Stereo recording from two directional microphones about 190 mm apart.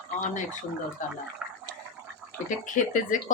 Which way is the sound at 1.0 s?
40° left (ahead or behind).